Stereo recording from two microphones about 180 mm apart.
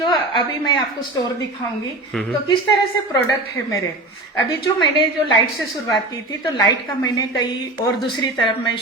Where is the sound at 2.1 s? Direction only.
5° left (ahead or behind).